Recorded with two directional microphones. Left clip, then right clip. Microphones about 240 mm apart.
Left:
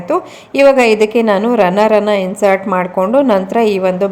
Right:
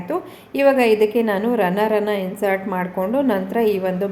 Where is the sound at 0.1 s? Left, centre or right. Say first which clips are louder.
Left 9 dB; centre.